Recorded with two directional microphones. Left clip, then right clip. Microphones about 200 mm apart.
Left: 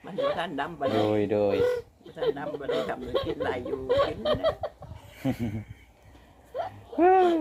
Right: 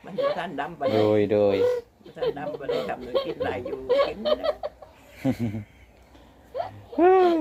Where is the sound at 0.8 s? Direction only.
Centre (ahead or behind).